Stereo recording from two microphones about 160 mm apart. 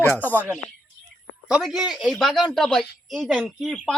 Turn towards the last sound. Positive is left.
turn(degrees=0)  # may be behind; listen again after turning